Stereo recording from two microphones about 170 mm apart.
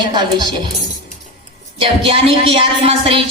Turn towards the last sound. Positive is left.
turn(degrees=-35)  # may be behind; listen again after turning